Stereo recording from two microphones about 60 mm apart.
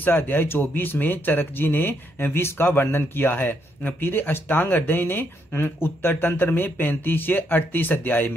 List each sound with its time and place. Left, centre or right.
0.0 s speech: left